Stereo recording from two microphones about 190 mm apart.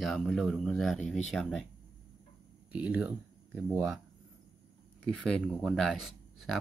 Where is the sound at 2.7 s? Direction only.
5° right (ahead or behind).